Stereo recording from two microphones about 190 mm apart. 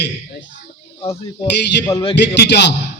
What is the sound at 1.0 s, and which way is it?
Speech, 30° left (ahead or behind).